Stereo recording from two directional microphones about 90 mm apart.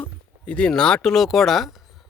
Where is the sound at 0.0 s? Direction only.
15° left (ahead or behind).